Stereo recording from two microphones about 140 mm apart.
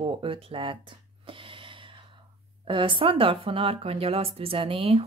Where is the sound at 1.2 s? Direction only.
40° right (ahead or behind).